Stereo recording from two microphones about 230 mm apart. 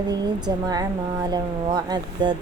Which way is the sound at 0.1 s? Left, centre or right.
Centre.